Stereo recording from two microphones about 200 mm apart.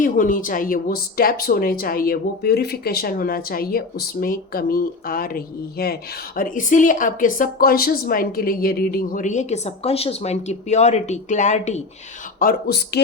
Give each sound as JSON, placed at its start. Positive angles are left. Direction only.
{"t": 0.0, "sound": "speech", "side_deg": 40}
{"t": 12.4, "sound": "speech", "side_deg": 50}